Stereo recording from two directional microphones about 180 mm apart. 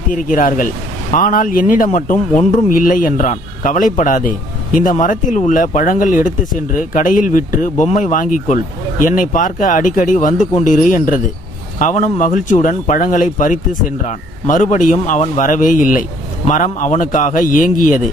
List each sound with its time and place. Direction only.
0.1 s a man's voice: 50° left (ahead or behind)